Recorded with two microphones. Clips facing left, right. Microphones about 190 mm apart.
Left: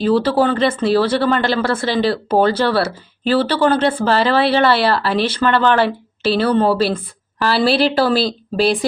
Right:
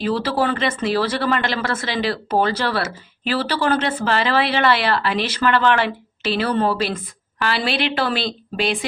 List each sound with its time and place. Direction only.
0.2 s speech: 30° left (ahead or behind)